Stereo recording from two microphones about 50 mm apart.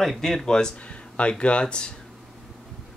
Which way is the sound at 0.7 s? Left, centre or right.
Left.